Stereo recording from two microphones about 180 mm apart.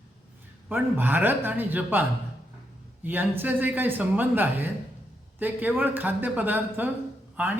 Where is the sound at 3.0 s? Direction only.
10° right (ahead or behind).